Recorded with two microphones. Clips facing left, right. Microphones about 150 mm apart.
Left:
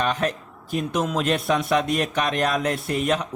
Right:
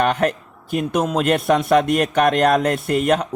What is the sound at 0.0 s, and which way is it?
A man's voice, 60° right (ahead or behind).